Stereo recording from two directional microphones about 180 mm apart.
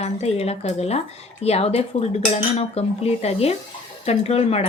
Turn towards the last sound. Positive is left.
turn(degrees=35)  # may be behind; listen again after turning